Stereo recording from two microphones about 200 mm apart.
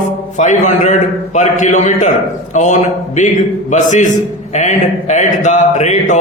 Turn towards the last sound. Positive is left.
turn(degrees=35)  # may be behind; listen again after turning